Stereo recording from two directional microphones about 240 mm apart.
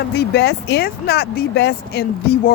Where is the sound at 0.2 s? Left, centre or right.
Left.